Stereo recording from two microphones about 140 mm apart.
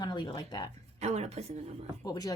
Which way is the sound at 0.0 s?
30° left (ahead or behind).